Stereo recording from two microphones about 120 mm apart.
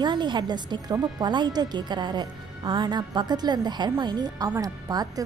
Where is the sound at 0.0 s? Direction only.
40° right (ahead or behind).